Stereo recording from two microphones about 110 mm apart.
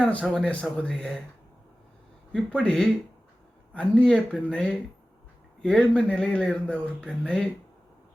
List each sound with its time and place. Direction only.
0.0 s speech: 10° left (ahead or behind)
2.3 s speech: 5° left (ahead or behind)